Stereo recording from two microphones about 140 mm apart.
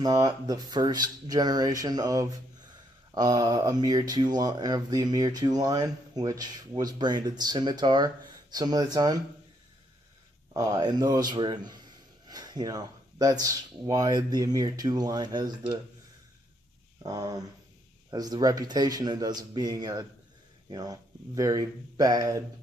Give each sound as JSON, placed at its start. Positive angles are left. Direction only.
{"t": 0.0, "sound": "speech", "side_deg": -25}
{"t": 10.5, "sound": "speech", "side_deg": -25}
{"t": 17.0, "sound": "speech", "side_deg": -25}